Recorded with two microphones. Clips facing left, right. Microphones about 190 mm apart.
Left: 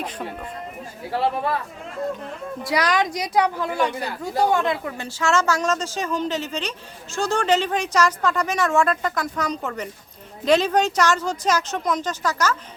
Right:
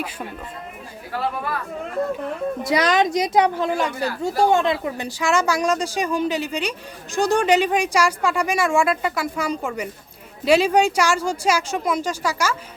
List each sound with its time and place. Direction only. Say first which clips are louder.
1.1 s speech: left 3 dB; 25° left (ahead or behind)
2.6 s speech: right 2 dB; 25° right (ahead or behind)
3.8 s speech: right 2 dB; 20° left (ahead or behind)
4.2 s a woman's voice: right 2 dB; 25° right (ahead or behind); by 12.5 s 10° right (ahead or behind)